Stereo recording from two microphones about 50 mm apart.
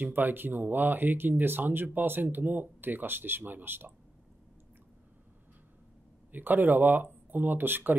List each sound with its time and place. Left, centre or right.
0.0 s speech: right
6.3 s speech: right